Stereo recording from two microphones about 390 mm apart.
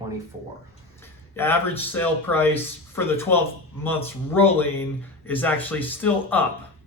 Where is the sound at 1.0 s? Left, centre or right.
Centre.